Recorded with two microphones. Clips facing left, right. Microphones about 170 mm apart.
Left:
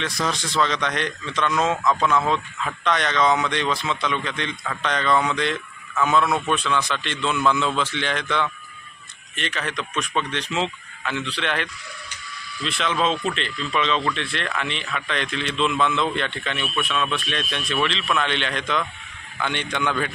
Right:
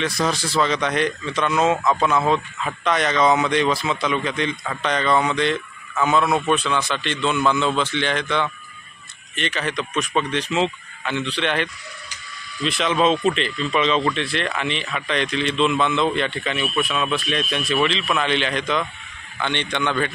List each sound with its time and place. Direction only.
0.0 s speech: 5° right (ahead or behind)
12.8 s speech: 5° right (ahead or behind)